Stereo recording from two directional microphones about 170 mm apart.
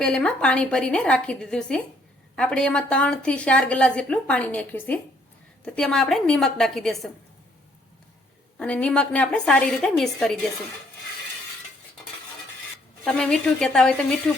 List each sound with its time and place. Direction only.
0.0 s a woman's voice: 5° left (ahead or behind)
8.5 s a woman's voice: 5° left (ahead or behind)
13.1 s a woman's voice: 5° left (ahead or behind)